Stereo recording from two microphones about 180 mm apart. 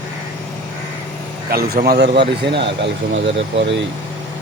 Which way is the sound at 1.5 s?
60° right (ahead or behind).